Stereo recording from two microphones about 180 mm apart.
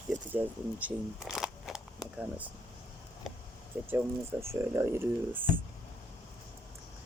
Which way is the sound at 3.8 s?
15° right (ahead or behind).